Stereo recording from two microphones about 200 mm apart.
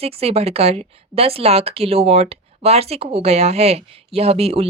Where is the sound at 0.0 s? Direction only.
30° right (ahead or behind).